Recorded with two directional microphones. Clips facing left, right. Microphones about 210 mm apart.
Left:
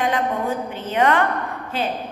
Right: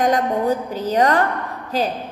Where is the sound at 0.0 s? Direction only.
40° right (ahead or behind).